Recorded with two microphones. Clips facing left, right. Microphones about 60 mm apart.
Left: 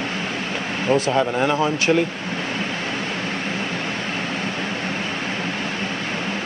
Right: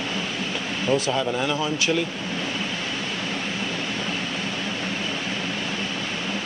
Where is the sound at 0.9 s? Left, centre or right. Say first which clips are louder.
Left 4 dB; left.